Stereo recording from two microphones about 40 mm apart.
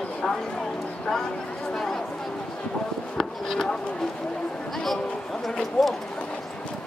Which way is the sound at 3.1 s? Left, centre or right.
Centre.